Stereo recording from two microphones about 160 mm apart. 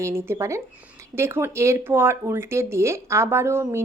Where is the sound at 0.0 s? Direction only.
15° right (ahead or behind).